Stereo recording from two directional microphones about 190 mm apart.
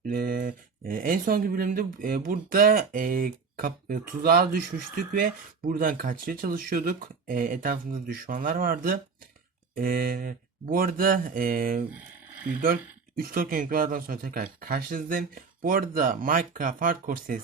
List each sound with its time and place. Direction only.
0.0 s speech: 50° right (ahead or behind)